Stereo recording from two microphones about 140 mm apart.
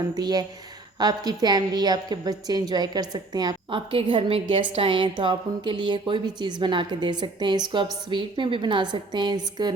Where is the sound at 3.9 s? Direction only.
40° right (ahead or behind).